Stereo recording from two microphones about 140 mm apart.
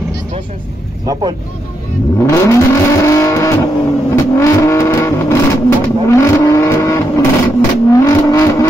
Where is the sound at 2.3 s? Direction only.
20° left (ahead or behind).